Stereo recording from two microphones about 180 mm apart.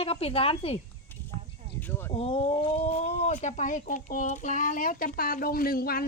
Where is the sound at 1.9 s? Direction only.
10° left (ahead or behind).